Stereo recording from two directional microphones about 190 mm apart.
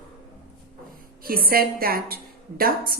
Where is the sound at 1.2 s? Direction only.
50° right (ahead or behind).